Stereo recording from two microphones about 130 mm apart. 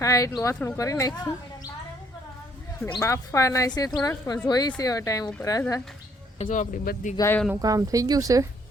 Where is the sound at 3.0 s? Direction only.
25° left (ahead or behind).